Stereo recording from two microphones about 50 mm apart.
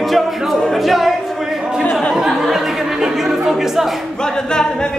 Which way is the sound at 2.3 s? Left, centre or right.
Centre.